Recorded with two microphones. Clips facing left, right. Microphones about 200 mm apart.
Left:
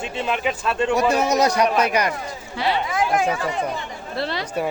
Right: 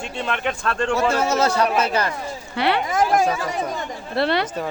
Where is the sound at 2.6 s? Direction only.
65° right (ahead or behind).